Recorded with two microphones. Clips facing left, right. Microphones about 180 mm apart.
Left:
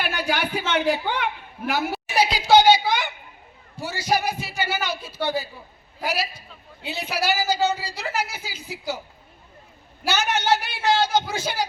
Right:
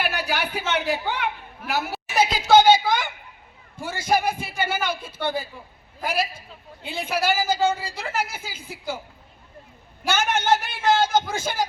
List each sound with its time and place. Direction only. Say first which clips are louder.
0.0 s speech: left 1 dB; 10° right (ahead or behind)
2.1 s a woman's voice: right 1 dB; 45° right (ahead or behind)
10.1 s a woman's voice: right 1 dB; 50° right (ahead or behind)